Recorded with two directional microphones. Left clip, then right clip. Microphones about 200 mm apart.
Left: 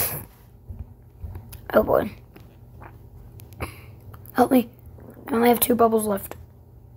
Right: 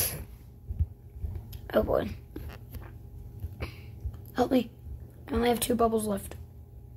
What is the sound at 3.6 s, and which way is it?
Throat clearing, 15° left (ahead or behind).